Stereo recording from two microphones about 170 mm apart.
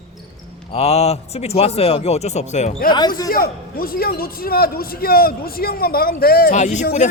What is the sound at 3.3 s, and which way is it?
A man's voice, 60° left (ahead or behind).